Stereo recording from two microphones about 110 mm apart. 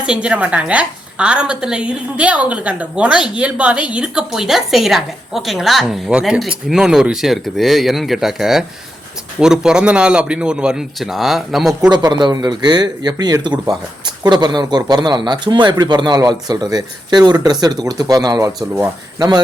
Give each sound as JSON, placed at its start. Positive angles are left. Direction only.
{"t": 0.0, "sound": "a woman's voice", "side_deg": -10}
{"t": 11.9, "sound": "speech", "side_deg": -40}